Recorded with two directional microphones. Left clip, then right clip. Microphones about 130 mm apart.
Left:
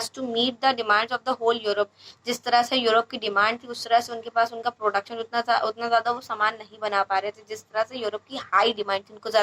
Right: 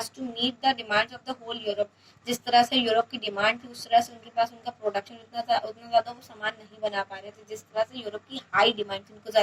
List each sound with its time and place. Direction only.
0.0 s speech: 30° left (ahead or behind)